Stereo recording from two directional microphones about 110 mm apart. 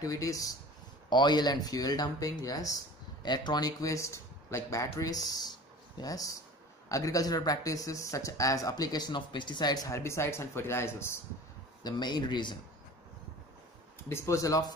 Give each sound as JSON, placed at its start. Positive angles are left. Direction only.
{"t": 0.0, "sound": "speech", "side_deg": 30}
{"t": 11.8, "sound": "speech", "side_deg": 40}
{"t": 14.0, "sound": "speech", "side_deg": 25}